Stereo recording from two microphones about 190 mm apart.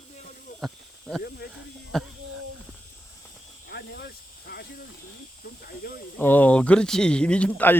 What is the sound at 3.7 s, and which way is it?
Hiss, 55° left (ahead or behind).